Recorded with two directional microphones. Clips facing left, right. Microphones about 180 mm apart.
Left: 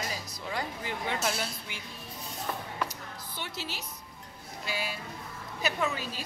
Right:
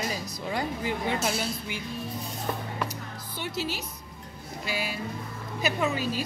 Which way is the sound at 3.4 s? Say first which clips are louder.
Right 8 dB; 5° right (ahead or behind).